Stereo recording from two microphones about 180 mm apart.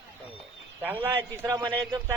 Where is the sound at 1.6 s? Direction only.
20° right (ahead or behind).